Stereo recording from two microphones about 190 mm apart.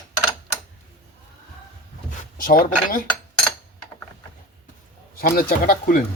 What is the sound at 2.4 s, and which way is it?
Speech, 50° left (ahead or behind).